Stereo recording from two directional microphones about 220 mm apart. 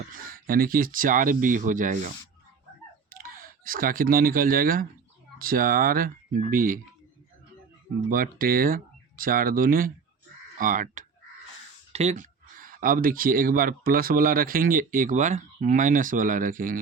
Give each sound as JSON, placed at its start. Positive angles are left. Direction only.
{"t": 0.1, "sound": "speech", "side_deg": -40}
{"t": 8.1, "sound": "speech", "side_deg": -40}